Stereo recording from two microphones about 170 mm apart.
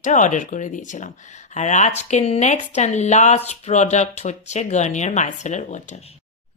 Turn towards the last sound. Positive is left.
turn(degrees=45)  # may be behind; listen again after turning